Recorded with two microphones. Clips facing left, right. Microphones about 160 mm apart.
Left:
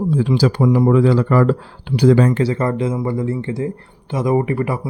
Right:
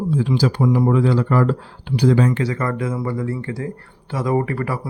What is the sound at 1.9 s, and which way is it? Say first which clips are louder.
Speech: left 4 dB; 65° left (ahead or behind).